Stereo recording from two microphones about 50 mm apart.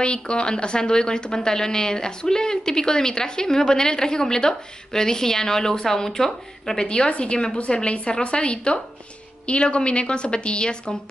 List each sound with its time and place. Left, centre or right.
0.0 s a woman's voice: centre